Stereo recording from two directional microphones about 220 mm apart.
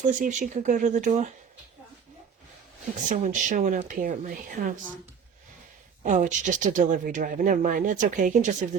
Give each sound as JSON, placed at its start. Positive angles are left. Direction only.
{"t": 0.2, "sound": "speech", "side_deg": -35}
{"t": 3.1, "sound": "speech", "side_deg": -35}
{"t": 6.0, "sound": "speech", "side_deg": -35}